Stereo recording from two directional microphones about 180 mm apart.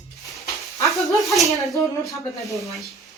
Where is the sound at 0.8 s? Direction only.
Centre (ahead or behind).